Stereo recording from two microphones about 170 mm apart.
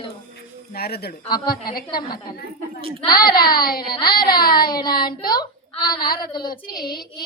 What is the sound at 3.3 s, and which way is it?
A woman's voice, 60° left (ahead or behind).